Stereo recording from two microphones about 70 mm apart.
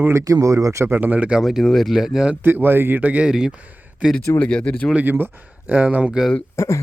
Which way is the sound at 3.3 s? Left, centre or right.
Centre.